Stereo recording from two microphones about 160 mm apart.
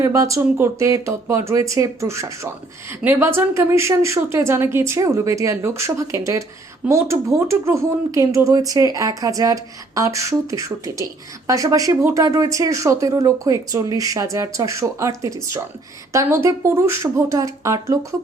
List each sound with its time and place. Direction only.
0.0 s a woman's voice: 20° right (ahead or behind)